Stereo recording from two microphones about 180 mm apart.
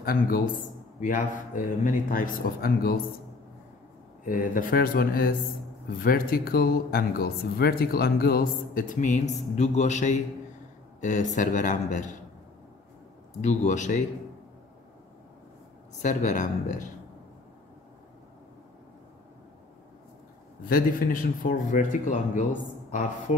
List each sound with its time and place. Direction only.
0.0 s speech: 55° left (ahead or behind)
4.3 s speech: 50° left (ahead or behind)
13.4 s speech: 40° left (ahead or behind)
16.0 s speech: 45° left (ahead or behind)
20.6 s speech: 50° left (ahead or behind)